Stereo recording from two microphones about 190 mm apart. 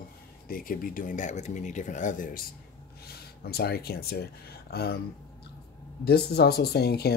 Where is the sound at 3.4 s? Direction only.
55° left (ahead or behind).